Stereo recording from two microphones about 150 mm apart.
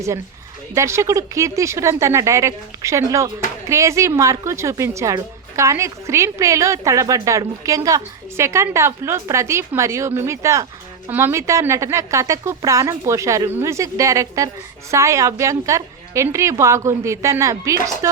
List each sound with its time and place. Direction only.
0.7 s speech: 20° right (ahead or behind)